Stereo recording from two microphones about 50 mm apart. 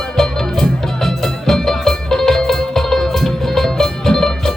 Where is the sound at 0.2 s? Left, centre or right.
Centre.